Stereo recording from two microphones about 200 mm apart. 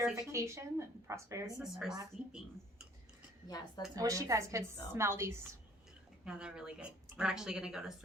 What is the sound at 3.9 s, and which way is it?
A woman's voice, 15° right (ahead or behind).